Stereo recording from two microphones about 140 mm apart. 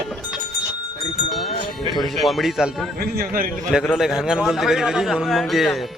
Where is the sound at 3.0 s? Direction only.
90° right.